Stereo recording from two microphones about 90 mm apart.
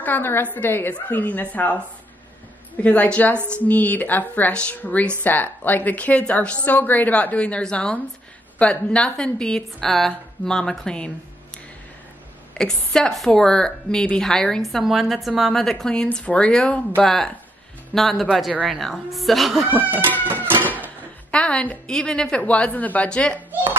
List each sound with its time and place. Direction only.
0.0 s speech: 20° left (ahead or behind)
2.8 s a woman's voice: 15° left (ahead or behind)
12.5 s a woman's voice: 5° left (ahead or behind)
19.7 s chicken: 20° right (ahead or behind)
21.3 s a woman's voice: 10° left (ahead or behind)